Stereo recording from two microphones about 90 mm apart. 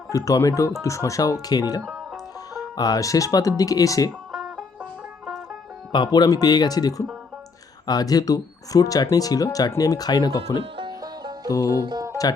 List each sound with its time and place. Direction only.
0.1 s speech: 40° left (ahead or behind)
4.3 s music: 5° right (ahead or behind)
5.9 s speech: 55° left (ahead or behind)
10.6 s music: 70° right (ahead or behind)
11.0 s music: 50° right (ahead or behind)
11.4 s speech: 35° left (ahead or behind)
11.8 s speech: 55° right (ahead or behind)